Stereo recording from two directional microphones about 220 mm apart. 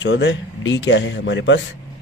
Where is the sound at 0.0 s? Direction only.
55° left (ahead or behind).